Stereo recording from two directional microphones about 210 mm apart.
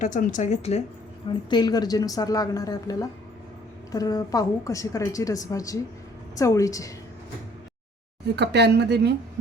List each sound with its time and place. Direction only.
0.0 s speech: 35° left (ahead or behind)
1.5 s a woman's voice: 20° left (ahead or behind)
8.4 s speech: 55° right (ahead or behind)